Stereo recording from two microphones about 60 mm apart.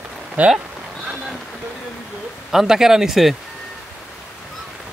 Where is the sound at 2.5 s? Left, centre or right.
Centre.